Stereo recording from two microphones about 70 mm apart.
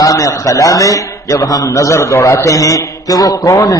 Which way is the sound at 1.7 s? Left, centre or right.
Left.